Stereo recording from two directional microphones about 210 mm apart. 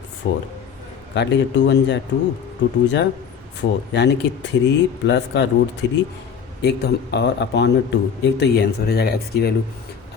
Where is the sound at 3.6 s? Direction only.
55° left (ahead or behind).